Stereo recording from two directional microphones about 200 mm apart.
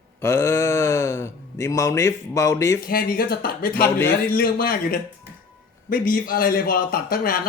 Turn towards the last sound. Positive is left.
turn(degrees=50)  # may be behind; listen again after turning